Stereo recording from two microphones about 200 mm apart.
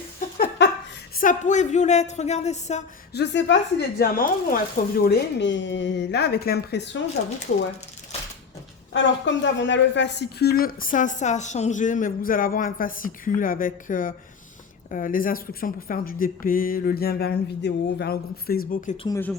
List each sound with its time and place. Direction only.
0.3 s a sound: 50° left (ahead or behind)
1.1 s speech: 40° left (ahead or behind)
3.1 s a woman's voice: 60° left (ahead or behind)
8.9 s a woman's voice: 65° left (ahead or behind); by 18.9 s 45° left (ahead or behind)
19.0 s speech: 15° left (ahead or behind)